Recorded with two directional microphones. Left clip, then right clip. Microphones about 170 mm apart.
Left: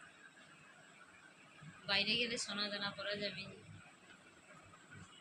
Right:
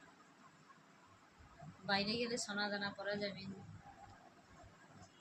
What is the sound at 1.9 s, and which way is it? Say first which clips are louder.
A man's voice: left 2 dB; 30° right (ahead or behind).